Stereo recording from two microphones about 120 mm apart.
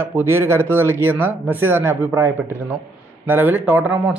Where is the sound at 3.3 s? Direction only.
15° right (ahead or behind).